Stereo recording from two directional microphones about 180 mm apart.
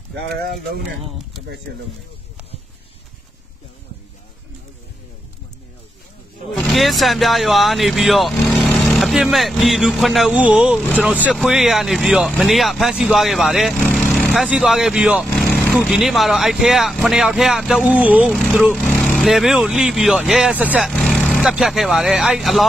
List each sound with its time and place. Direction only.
6.5 s speech: centre (ahead or behind)
8.5 s vehicle: 10° left (ahead or behind)
8.9 s speech: centre (ahead or behind)
20.9 s speech: 5° left (ahead or behind)